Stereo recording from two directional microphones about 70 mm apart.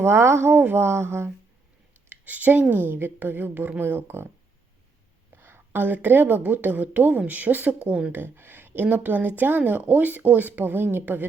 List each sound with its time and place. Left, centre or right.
0.0 s speech: right
2.0 s a woman's voice: right
5.3 s a woman's voice: right; by 8.1 s centre
8.1 s a woman's voice: right